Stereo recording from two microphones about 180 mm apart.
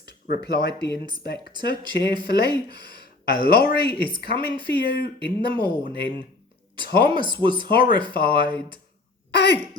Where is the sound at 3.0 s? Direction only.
55° left (ahead or behind).